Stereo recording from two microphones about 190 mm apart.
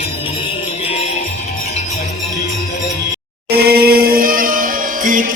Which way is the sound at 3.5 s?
55° right (ahead or behind).